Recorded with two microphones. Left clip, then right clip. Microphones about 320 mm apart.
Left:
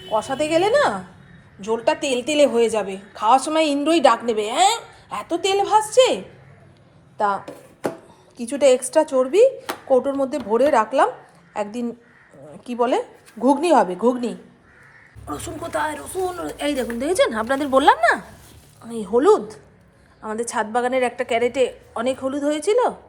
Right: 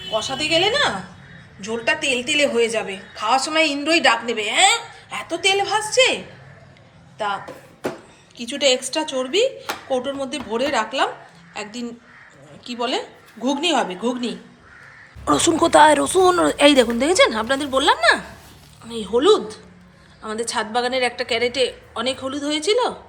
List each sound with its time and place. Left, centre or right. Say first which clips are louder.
0.1 s a woman's voice: even; centre
8.4 s a woman's voice: left 3 dB; left
9.0 s a woman's voice: left 6 dB; centre
9.3 s a woman's voice: left 4 dB; left
9.9 s a woman's voice: left 6 dB; centre
11.5 s a woman's voice: left 5 dB; left
13.4 s a woman's voice: left 4 dB; centre
15.3 s a woman's voice: right 12 dB; centre